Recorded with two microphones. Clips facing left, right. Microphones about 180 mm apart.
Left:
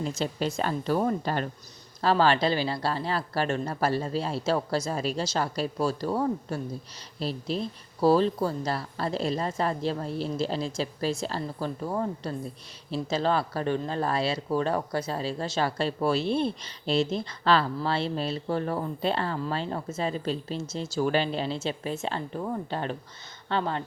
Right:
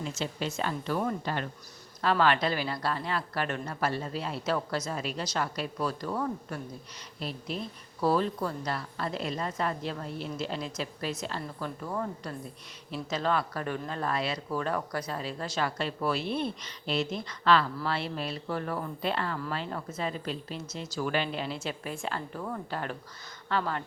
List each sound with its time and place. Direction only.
0.0 s speech: 35° left (ahead or behind)